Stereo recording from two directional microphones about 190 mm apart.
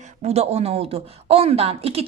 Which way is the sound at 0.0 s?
35° right (ahead or behind).